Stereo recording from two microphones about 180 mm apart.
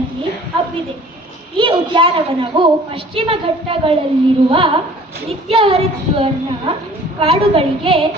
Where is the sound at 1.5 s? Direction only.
25° right (ahead or behind).